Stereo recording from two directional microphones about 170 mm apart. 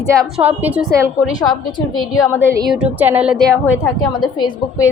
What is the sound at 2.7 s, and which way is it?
A woman's voice, 5° right (ahead or behind).